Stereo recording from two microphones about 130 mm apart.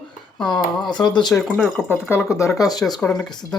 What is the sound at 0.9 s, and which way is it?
Speech, 35° left (ahead or behind).